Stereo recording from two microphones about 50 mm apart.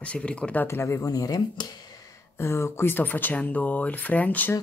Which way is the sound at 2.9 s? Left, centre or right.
Left.